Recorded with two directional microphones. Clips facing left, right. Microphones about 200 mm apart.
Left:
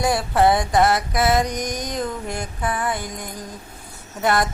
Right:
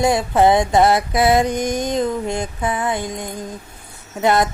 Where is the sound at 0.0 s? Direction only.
20° right (ahead or behind).